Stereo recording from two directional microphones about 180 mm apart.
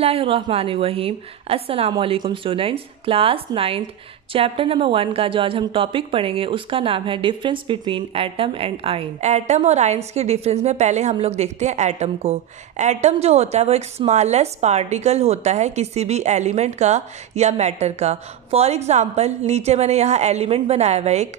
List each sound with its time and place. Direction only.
0.0 s speech: 30° right (ahead or behind)